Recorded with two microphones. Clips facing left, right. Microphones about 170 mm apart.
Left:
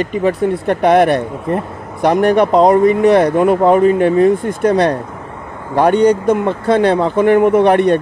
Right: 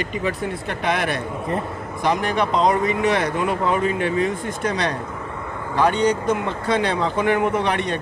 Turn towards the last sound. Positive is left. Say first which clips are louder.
# left 12 dB
turn(degrees=55)  # may be behind; listen again after turning